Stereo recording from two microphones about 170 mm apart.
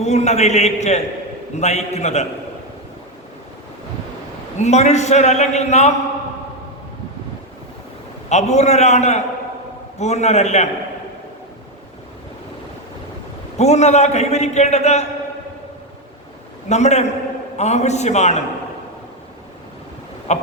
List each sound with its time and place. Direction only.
0.0 s a man's voice: 40° left (ahead or behind)
4.6 s a man's voice: 40° left (ahead or behind)
8.3 s a man's voice: 40° left (ahead or behind)
13.6 s a man's voice: 40° left (ahead or behind)
16.6 s a man's voice: 40° left (ahead or behind)
20.3 s a sound: 45° left (ahead or behind)